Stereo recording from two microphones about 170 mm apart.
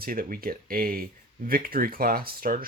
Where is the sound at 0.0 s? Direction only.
60° right (ahead or behind).